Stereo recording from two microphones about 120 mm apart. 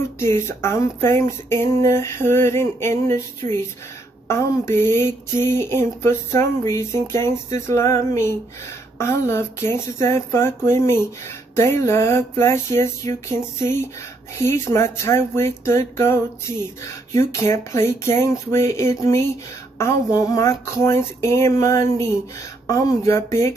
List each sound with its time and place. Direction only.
0.2 s speech: 20° left (ahead or behind)